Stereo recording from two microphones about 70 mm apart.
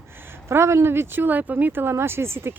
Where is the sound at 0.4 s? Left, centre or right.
Right.